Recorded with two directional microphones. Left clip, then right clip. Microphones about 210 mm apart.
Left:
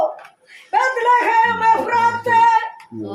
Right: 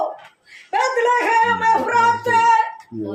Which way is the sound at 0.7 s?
5° right (ahead or behind).